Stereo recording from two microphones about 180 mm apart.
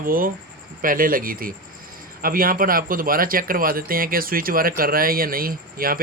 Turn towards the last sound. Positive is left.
turn(degrees=-55)  # may be behind; listen again after turning